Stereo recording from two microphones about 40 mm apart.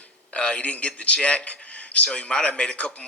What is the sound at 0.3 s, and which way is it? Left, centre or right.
Speech, left.